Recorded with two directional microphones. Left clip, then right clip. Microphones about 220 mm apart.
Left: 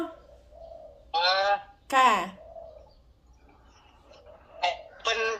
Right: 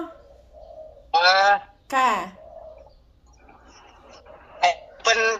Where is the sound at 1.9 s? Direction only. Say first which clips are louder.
Right 1 dB; centre (ahead or behind).